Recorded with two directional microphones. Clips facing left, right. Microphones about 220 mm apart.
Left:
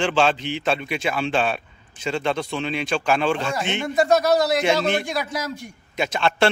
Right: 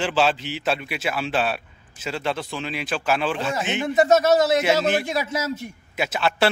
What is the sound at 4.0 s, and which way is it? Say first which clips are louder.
Speech: right 1 dB; 20° right (ahead or behind).